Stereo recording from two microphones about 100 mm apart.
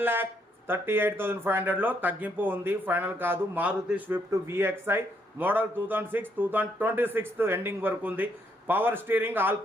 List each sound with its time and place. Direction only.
0.0 s a man's voice: 20° right (ahead or behind)
4.3 s a man's voice: 25° right (ahead or behind)